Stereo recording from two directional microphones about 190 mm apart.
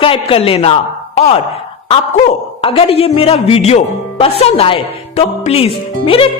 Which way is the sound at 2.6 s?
30° left (ahead or behind).